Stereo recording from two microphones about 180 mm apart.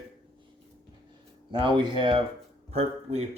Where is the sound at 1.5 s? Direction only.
25° right (ahead or behind).